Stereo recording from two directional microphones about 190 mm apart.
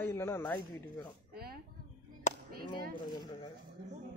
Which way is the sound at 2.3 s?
40° left (ahead or behind).